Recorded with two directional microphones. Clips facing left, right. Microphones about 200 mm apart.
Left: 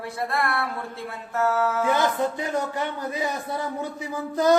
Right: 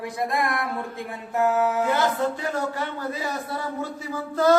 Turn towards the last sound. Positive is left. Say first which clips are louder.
# right 1 dB
turn(degrees=15)  # may be behind; listen again after turning